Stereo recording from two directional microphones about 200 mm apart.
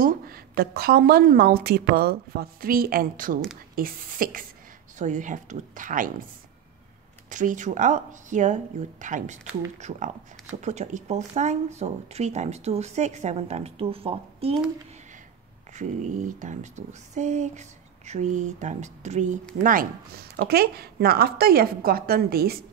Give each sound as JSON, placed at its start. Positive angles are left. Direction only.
{"t": 0.0, "sound": "a woman's voice", "side_deg": -45}
{"t": 7.2, "sound": "speech", "side_deg": -40}
{"t": 15.7, "sound": "a woman's voice", "side_deg": -35}